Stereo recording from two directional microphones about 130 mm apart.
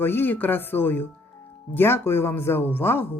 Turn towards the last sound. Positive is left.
turn(degrees=15)  # may be behind; listen again after turning